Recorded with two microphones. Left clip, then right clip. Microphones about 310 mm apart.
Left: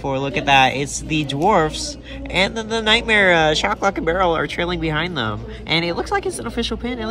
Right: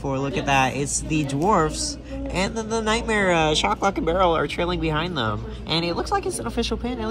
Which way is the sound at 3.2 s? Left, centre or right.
Left.